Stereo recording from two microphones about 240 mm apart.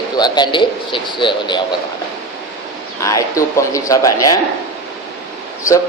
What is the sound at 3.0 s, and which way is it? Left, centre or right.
A man's voice, centre.